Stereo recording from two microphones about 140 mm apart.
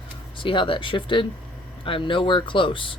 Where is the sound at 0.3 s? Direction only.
35° left (ahead or behind).